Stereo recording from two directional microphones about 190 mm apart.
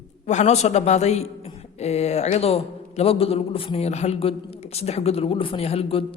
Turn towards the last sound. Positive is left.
turn(degrees=30)  # may be behind; listen again after turning